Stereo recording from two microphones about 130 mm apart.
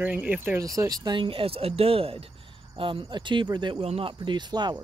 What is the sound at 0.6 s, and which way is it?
Speech, 30° right (ahead or behind).